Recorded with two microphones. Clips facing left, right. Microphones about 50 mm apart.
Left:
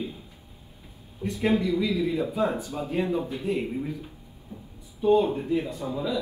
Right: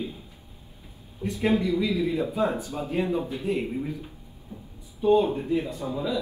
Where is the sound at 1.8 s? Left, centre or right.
Right.